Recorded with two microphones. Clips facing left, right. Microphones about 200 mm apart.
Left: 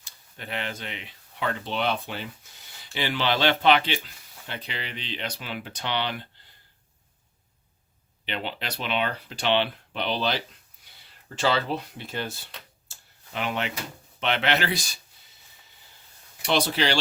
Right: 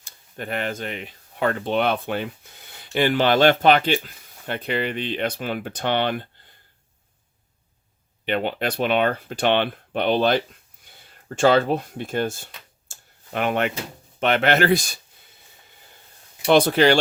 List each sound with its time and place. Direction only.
0.0 s speech: 50° right (ahead or behind)
8.2 s speech: 50° right (ahead or behind)
12.9 s tick-tock: 55° right (ahead or behind)
14.2 s speech: 50° right (ahead or behind)
16.5 s speech: 50° right (ahead or behind)